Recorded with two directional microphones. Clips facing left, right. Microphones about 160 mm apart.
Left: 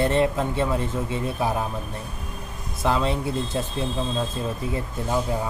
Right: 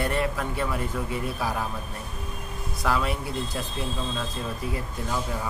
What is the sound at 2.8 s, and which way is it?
Speech, 25° left (ahead or behind).